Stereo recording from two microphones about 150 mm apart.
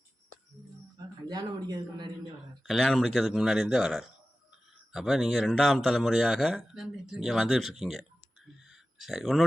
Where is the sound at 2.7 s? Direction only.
Centre (ahead or behind).